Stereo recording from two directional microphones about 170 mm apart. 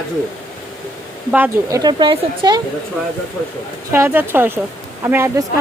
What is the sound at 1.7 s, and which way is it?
Speech, 25° right (ahead or behind).